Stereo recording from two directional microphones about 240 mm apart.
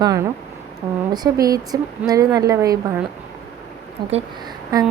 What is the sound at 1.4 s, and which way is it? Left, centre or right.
A woman's voice, centre.